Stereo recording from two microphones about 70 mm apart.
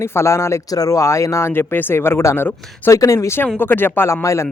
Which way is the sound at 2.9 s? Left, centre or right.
Left.